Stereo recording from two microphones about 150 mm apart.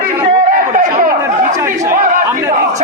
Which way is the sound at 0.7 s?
60° right (ahead or behind).